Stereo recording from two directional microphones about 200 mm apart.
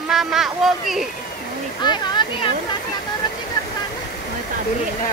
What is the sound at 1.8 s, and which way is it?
Speech, 20° left (ahead or behind).